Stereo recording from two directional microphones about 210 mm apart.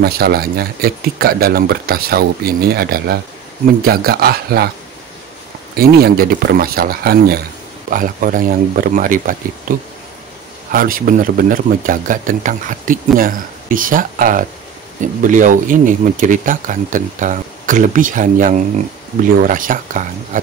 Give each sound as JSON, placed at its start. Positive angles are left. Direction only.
{"t": 0.0, "sound": "speech", "side_deg": -45}
{"t": 5.8, "sound": "speech", "side_deg": -45}